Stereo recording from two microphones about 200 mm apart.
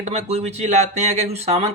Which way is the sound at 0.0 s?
30° right (ahead or behind).